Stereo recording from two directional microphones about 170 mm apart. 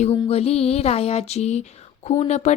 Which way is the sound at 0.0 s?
35° left (ahead or behind).